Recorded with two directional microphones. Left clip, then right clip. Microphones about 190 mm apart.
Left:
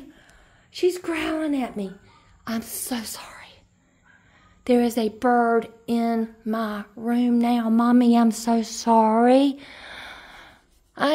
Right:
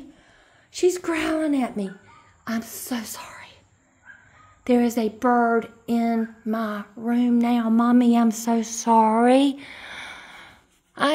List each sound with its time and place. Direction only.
0.7 s speech: centre (ahead or behind)
2.4 s a woman's voice: 5° left (ahead or behind)
4.6 s speech: centre (ahead or behind)